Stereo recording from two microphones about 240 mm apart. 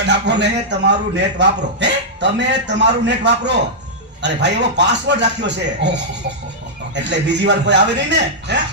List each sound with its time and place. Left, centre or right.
0.1 s a man's voice: right